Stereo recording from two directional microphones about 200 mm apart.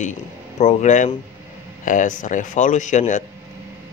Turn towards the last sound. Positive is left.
turn(degrees=40)  # may be behind; listen again after turning